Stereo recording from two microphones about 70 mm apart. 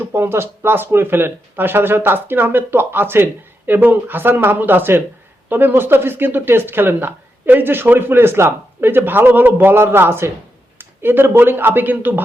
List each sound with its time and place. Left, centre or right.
0.0 s speech: right